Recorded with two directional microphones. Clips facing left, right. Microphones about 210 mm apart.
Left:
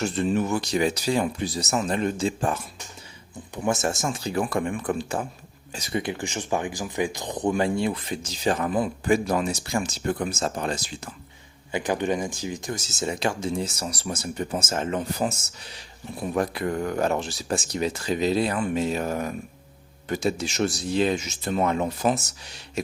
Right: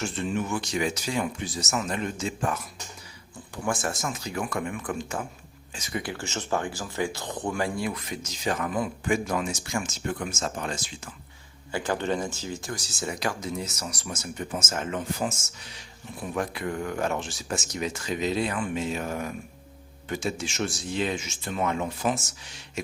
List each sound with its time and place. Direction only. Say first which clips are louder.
0.0 s speech: left 5 dB; 35° left (ahead or behind)
6.0 s speech: left 4 dB; 20° left (ahead or behind); by 11.1 s 35° left (ahead or behind)
11.7 s speech: left 3 dB; 15° left (ahead or behind); by 22.8 s 35° left (ahead or behind)